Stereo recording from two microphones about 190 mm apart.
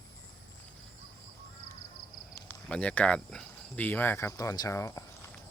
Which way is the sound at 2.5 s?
5° left (ahead or behind).